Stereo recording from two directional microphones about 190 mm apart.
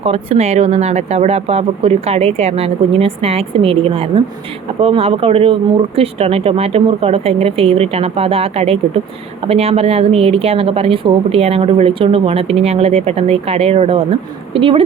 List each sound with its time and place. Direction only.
0.0 s a woman's voice: 30° right (ahead or behind)